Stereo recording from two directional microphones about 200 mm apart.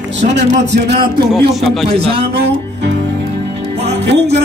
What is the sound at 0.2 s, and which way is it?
Speech, 60° right (ahead or behind).